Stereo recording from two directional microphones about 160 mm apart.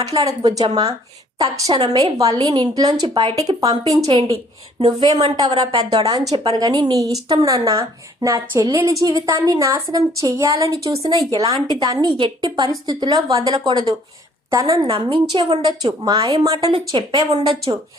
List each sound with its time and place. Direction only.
0.3 s a woman's voice: 25° right (ahead or behind)
16.6 s a woman's voice: 35° right (ahead or behind)